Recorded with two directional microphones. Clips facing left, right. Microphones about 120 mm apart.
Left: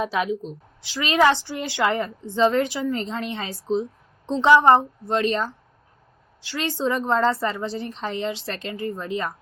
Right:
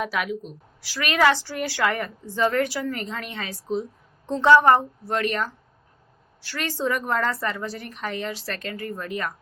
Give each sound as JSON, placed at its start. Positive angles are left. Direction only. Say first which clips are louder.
{"t": 0.0, "sound": "a woman's voice", "louder": "left 3 dB", "side_deg": 30}